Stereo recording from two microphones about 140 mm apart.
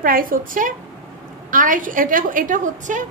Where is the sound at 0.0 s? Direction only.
85° right.